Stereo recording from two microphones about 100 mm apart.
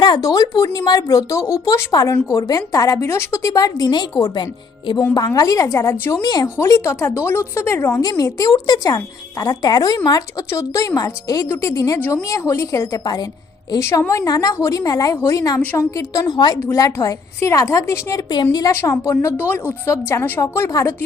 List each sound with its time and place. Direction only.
0.0 s speech: 40° left (ahead or behind)
5.1 s speech: 40° left (ahead or behind)
6.2 s a woman's voice: 40° left (ahead or behind)
8.2 s speech: 40° left (ahead or behind)
11.4 s a woman's voice: 25° left (ahead or behind)
15.6 s a woman's voice: 15° left (ahead or behind)
16.0 s speech: 35° left (ahead or behind)
18.7 s a woman's voice: 30° left (ahead or behind)
19.4 s a woman's voice: 20° left (ahead or behind)